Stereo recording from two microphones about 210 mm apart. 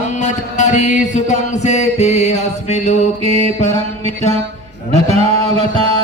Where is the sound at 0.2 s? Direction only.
35° left (ahead or behind).